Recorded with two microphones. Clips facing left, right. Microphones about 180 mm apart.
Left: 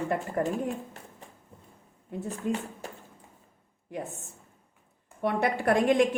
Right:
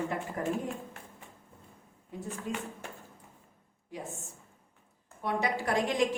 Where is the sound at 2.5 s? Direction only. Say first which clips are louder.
Left 7 dB; 55° left (ahead or behind).